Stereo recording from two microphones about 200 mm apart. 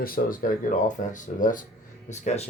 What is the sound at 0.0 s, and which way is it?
Speech, 45° left (ahead or behind).